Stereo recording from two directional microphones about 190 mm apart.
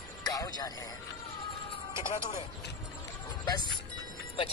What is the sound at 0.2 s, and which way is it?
Music, 20° left (ahead or behind).